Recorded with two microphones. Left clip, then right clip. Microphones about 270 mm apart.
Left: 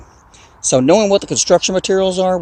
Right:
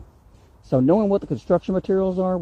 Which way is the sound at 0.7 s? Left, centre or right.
Centre.